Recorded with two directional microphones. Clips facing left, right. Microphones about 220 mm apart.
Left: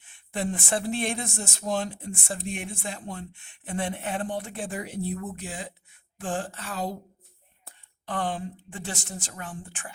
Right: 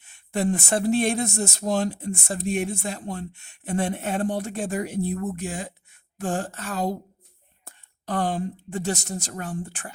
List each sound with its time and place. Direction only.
0.0 s a woman's voice: 40° right (ahead or behind)